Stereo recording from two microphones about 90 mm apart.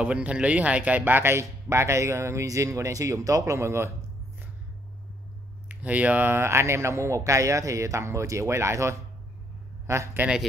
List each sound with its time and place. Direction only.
0.0 s speech: 10° right (ahead or behind); by 3.9 s 30° right (ahead or behind)
5.7 s speech: 15° right (ahead or behind); by 10.2 s 30° right (ahead or behind)